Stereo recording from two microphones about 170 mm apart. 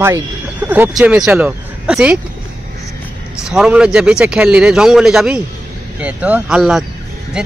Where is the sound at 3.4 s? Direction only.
5° right (ahead or behind).